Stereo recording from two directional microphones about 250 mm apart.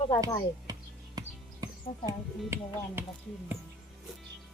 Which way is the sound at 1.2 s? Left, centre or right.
Centre.